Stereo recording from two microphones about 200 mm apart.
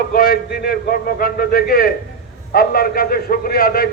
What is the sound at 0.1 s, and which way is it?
Speech, 45° left (ahead or behind).